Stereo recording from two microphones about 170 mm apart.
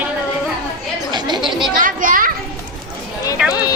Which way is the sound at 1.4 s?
Centre (ahead or behind).